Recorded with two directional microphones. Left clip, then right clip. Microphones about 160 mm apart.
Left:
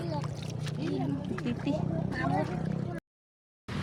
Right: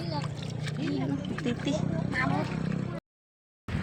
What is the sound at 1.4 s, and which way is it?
Speech, 10° right (ahead or behind).